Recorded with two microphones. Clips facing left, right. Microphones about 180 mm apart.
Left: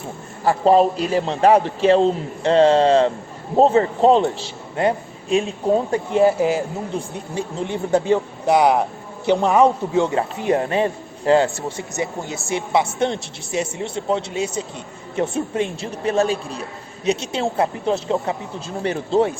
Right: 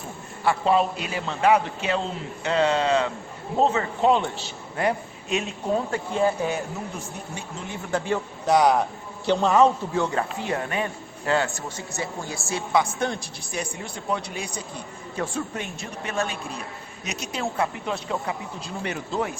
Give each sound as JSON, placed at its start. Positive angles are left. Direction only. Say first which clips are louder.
{"t": 0.4, "sound": "a man's voice", "louder": "left 6 dB", "side_deg": 35}